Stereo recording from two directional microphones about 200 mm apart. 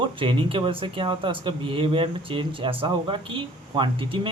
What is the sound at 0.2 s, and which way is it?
Speech, 25° right (ahead or behind).